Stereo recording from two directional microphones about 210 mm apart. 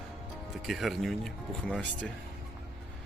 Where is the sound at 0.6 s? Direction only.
Centre (ahead or behind).